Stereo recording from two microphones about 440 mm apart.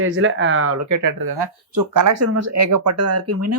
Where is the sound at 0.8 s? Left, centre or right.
Right.